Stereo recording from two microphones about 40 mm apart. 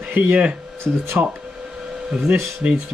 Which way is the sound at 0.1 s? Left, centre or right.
Right.